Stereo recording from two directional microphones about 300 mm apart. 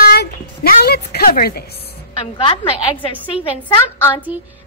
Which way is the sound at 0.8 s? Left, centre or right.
Left.